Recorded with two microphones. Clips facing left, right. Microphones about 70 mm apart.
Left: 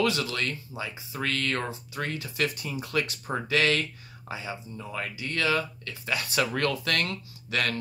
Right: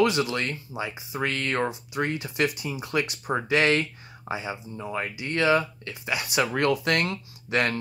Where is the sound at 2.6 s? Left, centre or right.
Centre.